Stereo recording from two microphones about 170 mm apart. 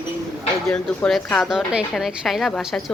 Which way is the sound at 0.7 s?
5° left (ahead or behind).